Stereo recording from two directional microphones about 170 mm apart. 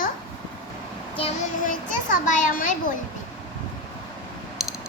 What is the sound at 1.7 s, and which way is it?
A child's voice, 50° left (ahead or behind).